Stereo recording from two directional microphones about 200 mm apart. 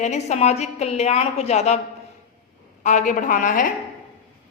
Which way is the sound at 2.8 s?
40° left (ahead or behind).